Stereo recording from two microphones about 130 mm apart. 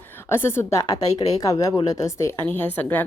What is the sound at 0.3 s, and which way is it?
A woman's voice, 20° left (ahead or behind).